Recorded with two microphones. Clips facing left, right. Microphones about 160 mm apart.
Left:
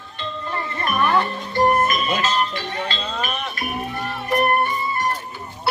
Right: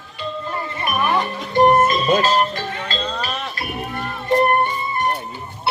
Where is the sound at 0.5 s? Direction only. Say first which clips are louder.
Left 2 dB; 15° right (ahead or behind); by 3.3 s 40° right (ahead or behind).